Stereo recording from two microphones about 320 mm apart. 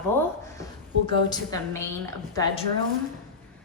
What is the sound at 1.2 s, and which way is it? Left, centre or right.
Speech, centre.